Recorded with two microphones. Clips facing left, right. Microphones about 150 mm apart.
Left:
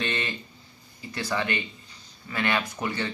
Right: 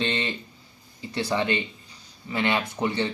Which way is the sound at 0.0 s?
25° right (ahead or behind).